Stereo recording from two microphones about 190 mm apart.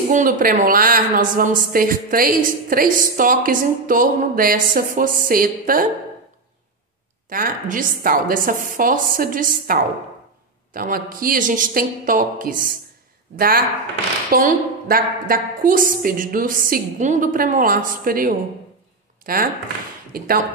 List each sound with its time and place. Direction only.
0.1 s a woman's voice: 45° right (ahead or behind)
7.2 s a woman's voice: 45° right (ahead or behind)